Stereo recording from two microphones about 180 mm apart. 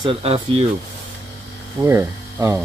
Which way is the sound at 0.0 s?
30° right (ahead or behind).